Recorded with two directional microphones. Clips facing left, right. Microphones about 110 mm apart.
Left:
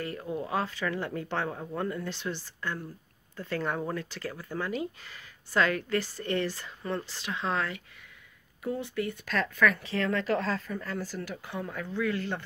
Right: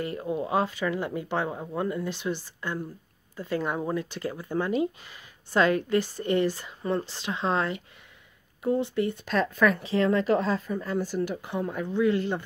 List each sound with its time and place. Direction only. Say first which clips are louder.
0.0 s speech: right 4 dB; 20° right (ahead or behind)